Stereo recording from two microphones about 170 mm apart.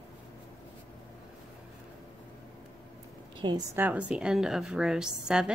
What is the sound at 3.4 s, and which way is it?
Speech, 25° right (ahead or behind).